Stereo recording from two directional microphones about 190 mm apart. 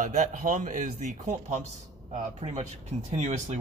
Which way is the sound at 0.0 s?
40° right (ahead or behind).